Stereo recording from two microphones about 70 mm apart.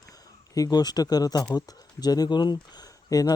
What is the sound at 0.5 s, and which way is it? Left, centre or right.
Speech, left.